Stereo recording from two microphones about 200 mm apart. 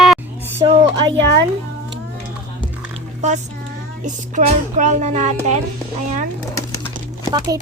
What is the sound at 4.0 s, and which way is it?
Speech, 35° right (ahead or behind).